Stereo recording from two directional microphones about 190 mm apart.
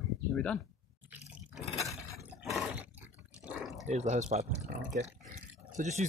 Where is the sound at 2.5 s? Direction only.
5° right (ahead or behind).